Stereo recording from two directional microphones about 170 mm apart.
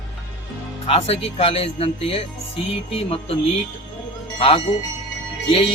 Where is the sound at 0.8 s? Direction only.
35° left (ahead or behind).